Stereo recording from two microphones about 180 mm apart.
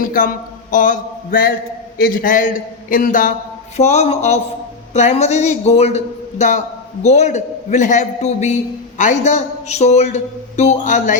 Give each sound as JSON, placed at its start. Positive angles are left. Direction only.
{"t": 0.0, "sound": "a man's voice", "side_deg": 50}
{"t": 3.8, "sound": "a man's voice", "side_deg": 35}